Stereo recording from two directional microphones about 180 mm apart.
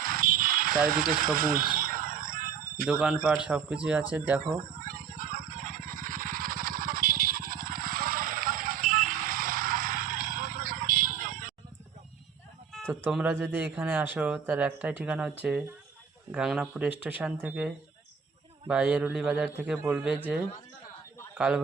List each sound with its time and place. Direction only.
0.0 s a sound: 50° right (ahead or behind)
0.9 s speech: 50° right (ahead or behind)
1.8 s a sound: 50° right (ahead or behind)
2.8 s a man's voice: 5° right (ahead or behind)
4.8 s vehicle: 50° right (ahead or behind)
12.9 s speech: 5° right (ahead or behind)
18.7 s a man's voice: 5° right (ahead or behind)
21.3 s a man's voice: 5° right (ahead or behind)